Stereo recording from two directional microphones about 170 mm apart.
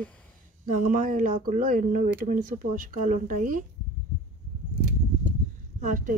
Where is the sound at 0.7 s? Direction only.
50° right (ahead or behind).